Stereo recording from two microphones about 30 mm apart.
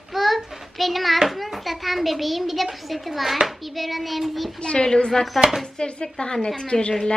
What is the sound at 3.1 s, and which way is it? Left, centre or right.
A child's voice, centre.